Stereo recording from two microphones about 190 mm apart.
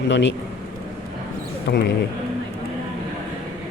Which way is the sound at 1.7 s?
60° left (ahead or behind).